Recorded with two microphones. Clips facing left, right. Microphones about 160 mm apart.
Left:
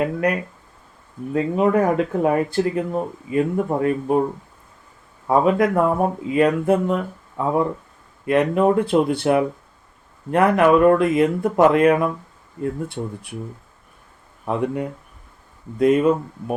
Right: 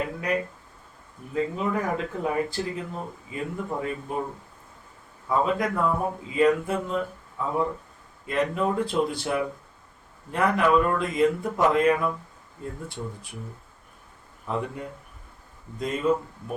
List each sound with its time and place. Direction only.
0.0 s speech: 60° left (ahead or behind)
5.3 s speech: 60° left (ahead or behind)
14.5 s speech: 65° left (ahead or behind)
15.8 s speech: 65° left (ahead or behind)